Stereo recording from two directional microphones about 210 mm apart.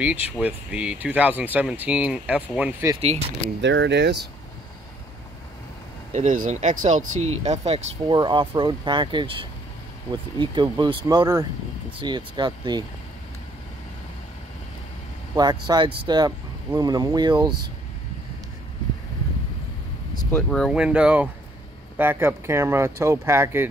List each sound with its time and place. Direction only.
0.0 s speech: 5° right (ahead or behind)
3.0 s speech: 30° right (ahead or behind)
3.6 s speech: 60° right (ahead or behind)
6.1 s speech: 40° right (ahead or behind); by 12.8 s 20° right (ahead or behind)
15.3 s speech: 20° right (ahead or behind)
20.2 s speech: 10° left (ahead or behind); by 23.7 s 10° right (ahead or behind)